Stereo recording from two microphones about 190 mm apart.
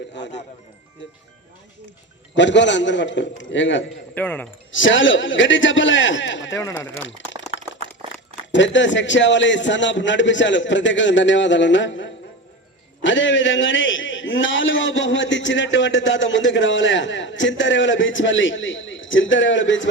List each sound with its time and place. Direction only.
0.2 s a man's voice: 65° left (ahead or behind)
2.3 s a man's voice: 70° left (ahead or behind)
4.1 s a man's voice: 10° left (ahead or behind)
4.7 s a man's voice: 85° left
6.6 s a man's voice: 20° left (ahead or behind)
8.5 s a man's voice: 75° left (ahead or behind)